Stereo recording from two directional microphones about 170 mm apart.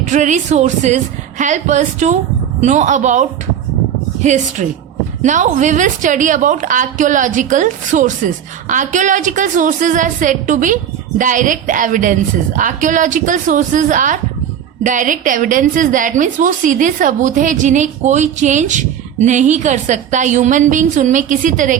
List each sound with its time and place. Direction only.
0.1 s a woman's voice: 45° right (ahead or behind)